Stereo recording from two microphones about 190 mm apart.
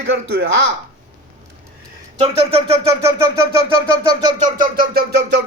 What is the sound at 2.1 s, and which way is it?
Speech, 30° right (ahead or behind).